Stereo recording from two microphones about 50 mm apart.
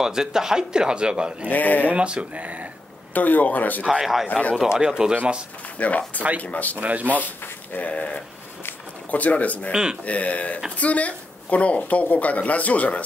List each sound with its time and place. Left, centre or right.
0.0 s speech: centre
1.5 s speech: left
1.9 s speech: right
3.2 s speech: left
4.0 s speech: centre
4.3 s speech: left
4.6 s speech: centre
5.8 s speech: left
6.8 s speech: right
7.4 s a sound: left
7.9 s speech: left
9.7 s speech: centre
10.0 s speech: left